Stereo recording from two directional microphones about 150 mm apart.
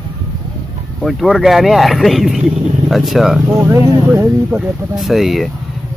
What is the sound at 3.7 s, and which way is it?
Speech, 15° right (ahead or behind).